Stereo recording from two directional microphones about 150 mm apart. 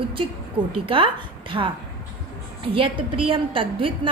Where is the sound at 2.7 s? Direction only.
35° right (ahead or behind).